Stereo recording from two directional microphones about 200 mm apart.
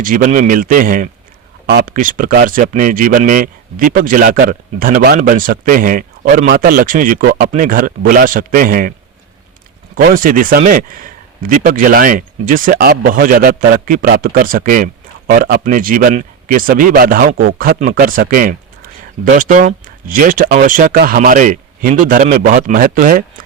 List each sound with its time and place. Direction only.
0.0 s speech: 45° right (ahead or behind)
9.9 s speech: 45° right (ahead or behind)